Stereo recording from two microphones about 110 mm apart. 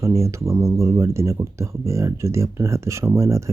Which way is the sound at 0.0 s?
25° right (ahead or behind).